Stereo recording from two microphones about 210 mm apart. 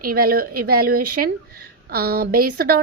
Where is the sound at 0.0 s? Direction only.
45° right (ahead or behind).